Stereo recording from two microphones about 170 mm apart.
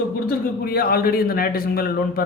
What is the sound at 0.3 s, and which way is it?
A man's voice, 65° left (ahead or behind).